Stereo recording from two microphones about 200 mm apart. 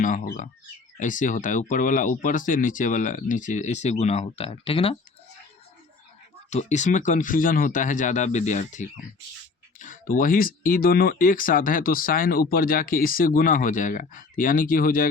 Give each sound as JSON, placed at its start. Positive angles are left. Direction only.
{"t": 0.9, "sound": "speech", "side_deg": 40}
{"t": 6.5, "sound": "speech", "side_deg": 35}